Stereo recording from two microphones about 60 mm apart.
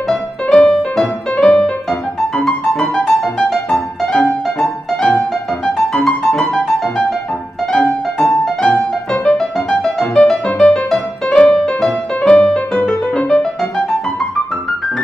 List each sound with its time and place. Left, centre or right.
0.1 s music: centre